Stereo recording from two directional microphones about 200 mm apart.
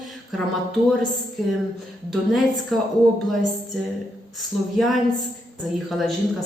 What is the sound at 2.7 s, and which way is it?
Speech, centre (ahead or behind).